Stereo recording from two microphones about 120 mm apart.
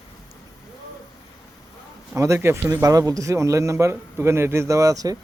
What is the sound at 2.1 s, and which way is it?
A man's voice, 25° right (ahead or behind).